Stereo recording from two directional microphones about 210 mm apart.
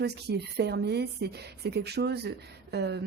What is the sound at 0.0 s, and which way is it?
A woman's voice, 50° right (ahead or behind).